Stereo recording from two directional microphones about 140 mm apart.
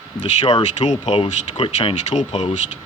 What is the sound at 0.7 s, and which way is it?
Speech, 55° left (ahead or behind).